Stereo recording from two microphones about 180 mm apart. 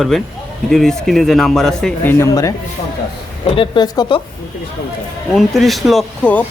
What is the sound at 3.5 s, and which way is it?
Speech, 30° left (ahead or behind).